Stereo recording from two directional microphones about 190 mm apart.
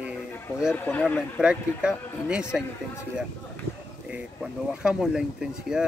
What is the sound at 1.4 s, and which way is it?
Speech, 5° right (ahead or behind).